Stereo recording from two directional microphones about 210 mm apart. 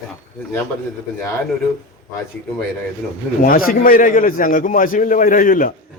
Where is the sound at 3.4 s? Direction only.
40° left (ahead or behind).